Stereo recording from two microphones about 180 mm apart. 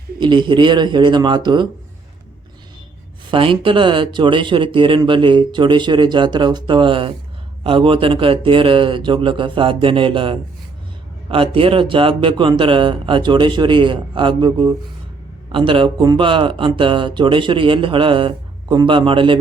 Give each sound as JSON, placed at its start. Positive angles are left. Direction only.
{"t": 0.2, "sound": "speech", "side_deg": -25}
{"t": 3.3, "sound": "speech", "side_deg": -30}